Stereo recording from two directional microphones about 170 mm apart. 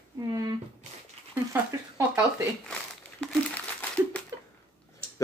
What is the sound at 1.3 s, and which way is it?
Speech, 15° right (ahead or behind).